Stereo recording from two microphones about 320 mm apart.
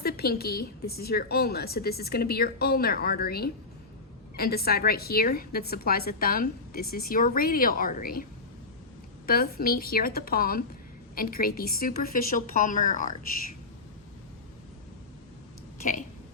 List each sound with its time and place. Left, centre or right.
0.0 s a woman's voice: left
9.2 s a woman's voice: left